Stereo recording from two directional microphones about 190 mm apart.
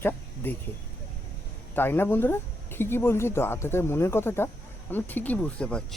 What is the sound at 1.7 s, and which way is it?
Speech, 10° left (ahead or behind).